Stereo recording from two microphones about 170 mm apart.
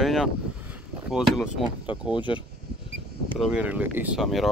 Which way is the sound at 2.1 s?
30° left (ahead or behind).